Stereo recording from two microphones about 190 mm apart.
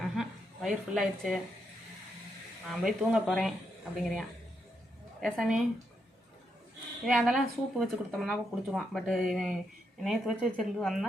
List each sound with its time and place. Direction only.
0.0 s a sound: centre (ahead or behind)
2.6 s speech: 5° right (ahead or behind)
7.0 s speech: centre (ahead or behind)